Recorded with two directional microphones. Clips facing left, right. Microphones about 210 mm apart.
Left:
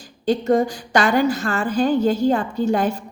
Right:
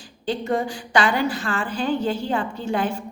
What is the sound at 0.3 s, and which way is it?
A woman's voice, 40° left (ahead or behind).